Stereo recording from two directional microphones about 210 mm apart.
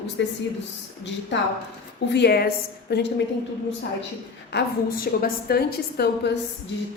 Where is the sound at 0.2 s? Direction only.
55° left (ahead or behind).